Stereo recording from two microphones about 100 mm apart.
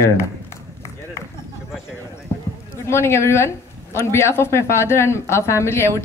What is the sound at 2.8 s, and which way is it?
A woman's voice, 25° left (ahead or behind).